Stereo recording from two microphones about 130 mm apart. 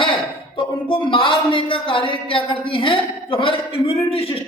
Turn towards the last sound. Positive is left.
turn(degrees=50)  # may be behind; listen again after turning